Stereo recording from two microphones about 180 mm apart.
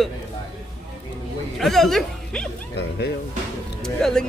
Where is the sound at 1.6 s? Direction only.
Centre (ahead or behind).